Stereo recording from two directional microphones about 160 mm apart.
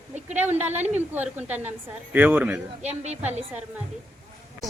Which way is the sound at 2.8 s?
45° right (ahead or behind).